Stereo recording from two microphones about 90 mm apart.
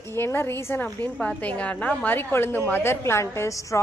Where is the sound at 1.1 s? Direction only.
15° left (ahead or behind).